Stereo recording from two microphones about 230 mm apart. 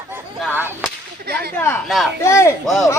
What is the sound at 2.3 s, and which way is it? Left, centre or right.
Speech, centre.